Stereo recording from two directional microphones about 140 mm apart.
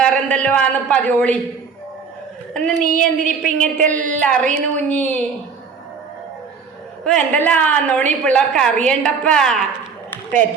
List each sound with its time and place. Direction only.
0.0 s a woman's voice: 10° left (ahead or behind)
2.5 s speech: 5° left (ahead or behind)
2.8 s a woman's voice: 70° right (ahead or behind)
3.4 s a woman's voice: 10° left (ahead or behind)
7.0 s a woman's voice: 5° left (ahead or behind)